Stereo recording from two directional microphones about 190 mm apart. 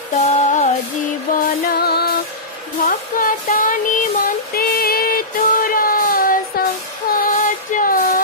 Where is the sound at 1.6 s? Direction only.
55° left (ahead or behind).